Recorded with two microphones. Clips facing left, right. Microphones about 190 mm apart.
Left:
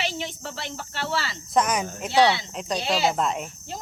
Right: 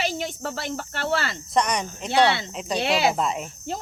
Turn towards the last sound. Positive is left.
turn(degrees=-5)  # may be behind; listen again after turning